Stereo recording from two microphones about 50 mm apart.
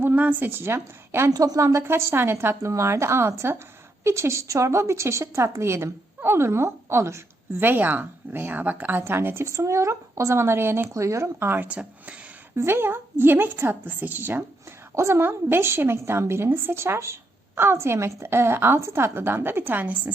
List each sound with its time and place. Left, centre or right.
0.0 s a sound: right
0.3 s a woman's voice: right
1.5 s speech: right
1.9 s a woman's voice: right
2.7 s a woman's voice: right
7.6 s a woman's voice: right
10.9 s speech: right
11.3 s a woman's voice: right
11.7 s speech: right
12.5 s a woman's voice: right
14.9 s a woman's voice: right
15.3 s a woman's voice: right